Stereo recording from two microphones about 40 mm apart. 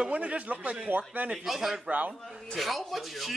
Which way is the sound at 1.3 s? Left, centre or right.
Centre.